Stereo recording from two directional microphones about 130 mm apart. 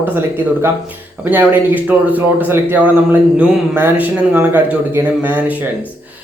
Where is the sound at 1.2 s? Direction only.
15° right (ahead or behind).